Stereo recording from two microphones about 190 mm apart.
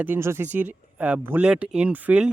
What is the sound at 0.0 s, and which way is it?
Speech, 10° right (ahead or behind).